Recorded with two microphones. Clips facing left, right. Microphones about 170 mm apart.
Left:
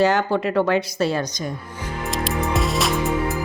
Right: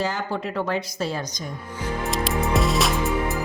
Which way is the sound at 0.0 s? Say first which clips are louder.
Left 8 dB; 75° left (ahead or behind).